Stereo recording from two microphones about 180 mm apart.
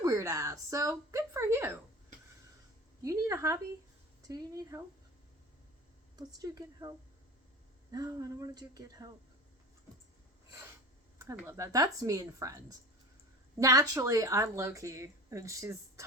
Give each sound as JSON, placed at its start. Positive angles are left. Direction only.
{"t": 0.0, "sound": "speech", "side_deg": -15}
{"t": 3.0, "sound": "a woman's voice", "side_deg": -20}
{"t": 6.1, "sound": "speech", "side_deg": -20}
{"t": 11.2, "sound": "speech", "side_deg": -15}